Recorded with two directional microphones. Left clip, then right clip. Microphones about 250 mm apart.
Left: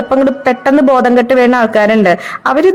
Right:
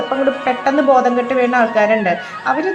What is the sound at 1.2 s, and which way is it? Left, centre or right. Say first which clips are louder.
A woman's voice: left 6 dB; left.